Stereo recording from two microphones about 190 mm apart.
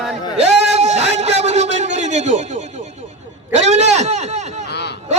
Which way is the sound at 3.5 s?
35° right (ahead or behind).